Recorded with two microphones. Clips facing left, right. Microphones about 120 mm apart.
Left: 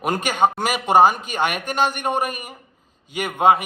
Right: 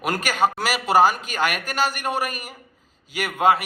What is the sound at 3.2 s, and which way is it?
Speech, 25° left (ahead or behind).